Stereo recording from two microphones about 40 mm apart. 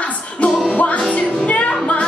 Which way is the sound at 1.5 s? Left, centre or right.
Left.